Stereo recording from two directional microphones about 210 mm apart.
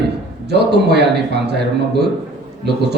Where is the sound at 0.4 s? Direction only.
50° right (ahead or behind).